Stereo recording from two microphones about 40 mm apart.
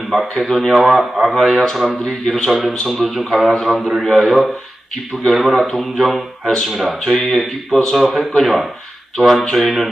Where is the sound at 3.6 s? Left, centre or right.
Centre.